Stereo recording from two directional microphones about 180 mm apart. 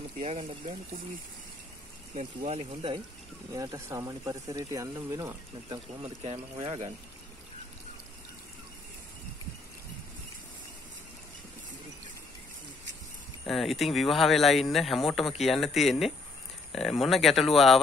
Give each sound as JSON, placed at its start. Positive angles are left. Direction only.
{"t": 0.2, "sound": "speech", "side_deg": -40}
{"t": 2.1, "sound": "speech", "side_deg": -35}
{"t": 3.5, "sound": "speech", "side_deg": -20}
{"t": 6.0, "sound": "speech", "side_deg": -30}
{"t": 13.5, "sound": "speech", "side_deg": 0}